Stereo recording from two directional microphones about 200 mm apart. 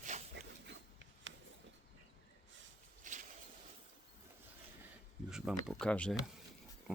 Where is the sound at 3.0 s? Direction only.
40° right (ahead or behind).